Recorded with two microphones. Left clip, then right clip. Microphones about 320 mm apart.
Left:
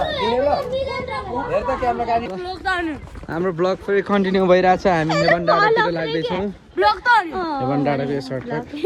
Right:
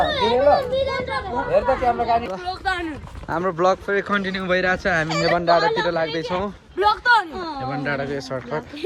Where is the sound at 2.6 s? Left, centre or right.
Centre.